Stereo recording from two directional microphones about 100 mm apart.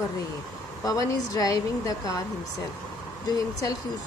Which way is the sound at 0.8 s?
35° left (ahead or behind).